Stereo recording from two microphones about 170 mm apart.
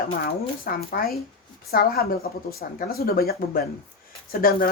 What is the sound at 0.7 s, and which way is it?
Speech, 60° left (ahead or behind).